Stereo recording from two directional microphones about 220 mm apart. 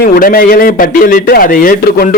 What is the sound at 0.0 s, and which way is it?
A man's voice, 40° left (ahead or behind).